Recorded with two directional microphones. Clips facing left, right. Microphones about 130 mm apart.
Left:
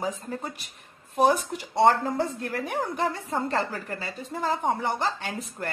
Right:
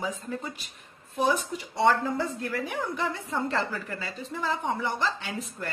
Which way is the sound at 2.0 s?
45° left (ahead or behind).